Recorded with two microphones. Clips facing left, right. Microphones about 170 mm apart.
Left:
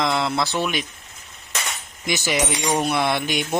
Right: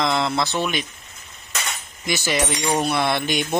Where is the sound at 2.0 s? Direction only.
15° left (ahead or behind).